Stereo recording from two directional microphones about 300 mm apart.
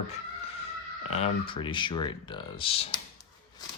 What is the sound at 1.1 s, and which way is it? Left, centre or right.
Speech, centre.